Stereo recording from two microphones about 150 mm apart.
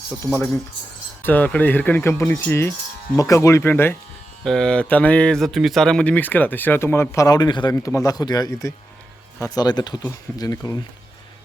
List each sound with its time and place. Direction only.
1.2 s speech: 10° left (ahead or behind)
4.4 s speech: 5° left (ahead or behind); by 10.8 s 20° left (ahead or behind)